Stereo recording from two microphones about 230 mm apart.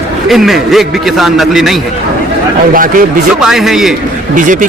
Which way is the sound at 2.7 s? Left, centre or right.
Right.